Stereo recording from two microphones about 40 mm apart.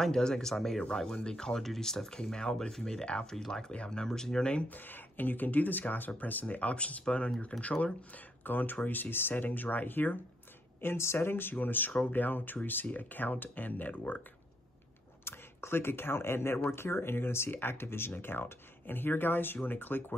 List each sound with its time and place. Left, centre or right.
0.0 s speech: centre
0.9 s speech: centre
3.1 s speech: left
3.3 s speech: centre
3.7 s speech: left
4.6 s speech: left
6.4 s speech: left
8.5 s speech: left
10.8 s speech: left
11.6 s speech: left
15.2 s speech: left